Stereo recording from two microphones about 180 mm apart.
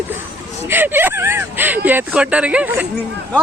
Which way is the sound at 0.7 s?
10° right (ahead or behind).